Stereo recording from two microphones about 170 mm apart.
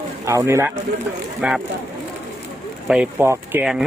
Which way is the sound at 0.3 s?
15° right (ahead or behind).